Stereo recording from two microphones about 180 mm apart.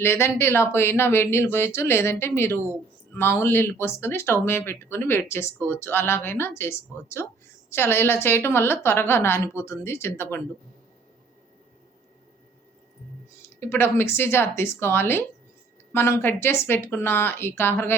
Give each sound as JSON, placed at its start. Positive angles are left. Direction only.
{"t": 0.0, "sound": "speech", "side_deg": 15}
{"t": 13.6, "sound": "speech", "side_deg": 10}